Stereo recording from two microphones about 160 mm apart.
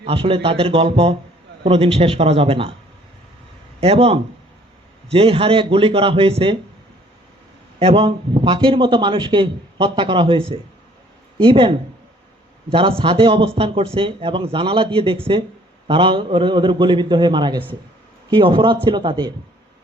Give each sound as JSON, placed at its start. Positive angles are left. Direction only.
{"t": 0.0, "sound": "a man's voice", "side_deg": -35}
{"t": 3.8, "sound": "a man's voice", "side_deg": -35}
{"t": 7.8, "sound": "a man's voice", "side_deg": -35}
{"t": 12.7, "sound": "a man's voice", "side_deg": -35}